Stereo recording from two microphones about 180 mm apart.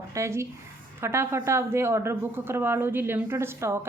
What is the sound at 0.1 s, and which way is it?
Speech, 15° right (ahead or behind).